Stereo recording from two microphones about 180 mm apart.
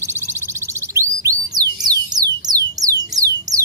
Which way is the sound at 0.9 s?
20° right (ahead or behind).